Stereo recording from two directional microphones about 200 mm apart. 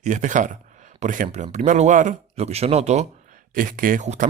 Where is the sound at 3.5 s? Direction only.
45° right (ahead or behind).